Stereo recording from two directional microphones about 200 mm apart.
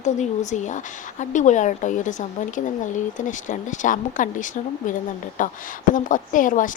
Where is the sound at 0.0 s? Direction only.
35° left (ahead or behind).